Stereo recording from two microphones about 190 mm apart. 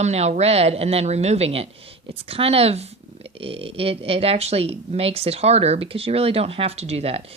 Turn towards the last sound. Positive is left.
turn(degrees=-35)  # may be behind; listen again after turning